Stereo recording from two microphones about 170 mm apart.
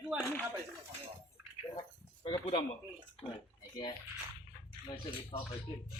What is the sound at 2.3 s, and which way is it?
Speech, 25° left (ahead or behind).